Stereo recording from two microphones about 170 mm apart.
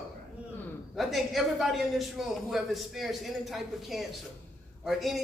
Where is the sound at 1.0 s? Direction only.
Centre (ahead or behind).